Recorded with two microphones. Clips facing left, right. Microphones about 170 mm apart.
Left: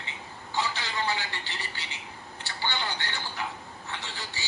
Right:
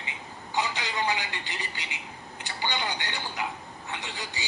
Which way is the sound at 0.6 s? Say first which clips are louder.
Right 1 dB; 15° right (ahead or behind).